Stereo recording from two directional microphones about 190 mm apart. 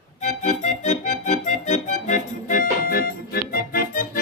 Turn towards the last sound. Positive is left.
turn(degrees=50)  # may be behind; listen again after turning